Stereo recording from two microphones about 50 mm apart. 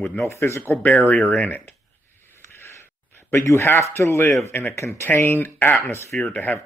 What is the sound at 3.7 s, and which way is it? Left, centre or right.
A man's voice, left.